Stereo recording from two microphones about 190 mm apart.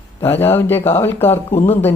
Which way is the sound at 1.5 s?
35° left (ahead or behind).